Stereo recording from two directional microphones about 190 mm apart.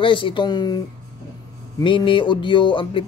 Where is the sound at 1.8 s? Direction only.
25° left (ahead or behind).